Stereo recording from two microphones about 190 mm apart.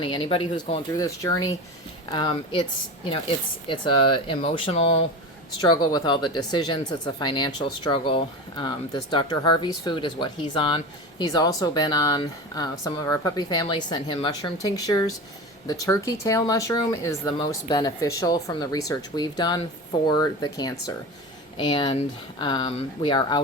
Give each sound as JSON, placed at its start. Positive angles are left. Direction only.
{"t": 0.0, "sound": "speech", "side_deg": 25}
{"t": 3.7, "sound": "speech", "side_deg": 25}